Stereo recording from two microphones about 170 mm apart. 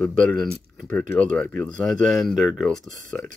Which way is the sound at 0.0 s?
10° left (ahead or behind).